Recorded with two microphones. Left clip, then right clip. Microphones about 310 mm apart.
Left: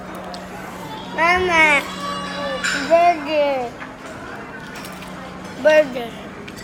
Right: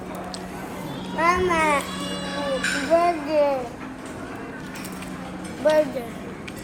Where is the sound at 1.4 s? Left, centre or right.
Left.